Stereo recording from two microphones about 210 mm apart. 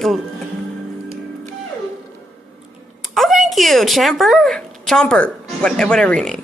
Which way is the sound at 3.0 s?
Centre (ahead or behind).